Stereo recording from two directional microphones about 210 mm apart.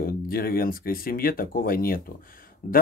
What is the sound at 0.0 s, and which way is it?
Speech, 45° left (ahead or behind).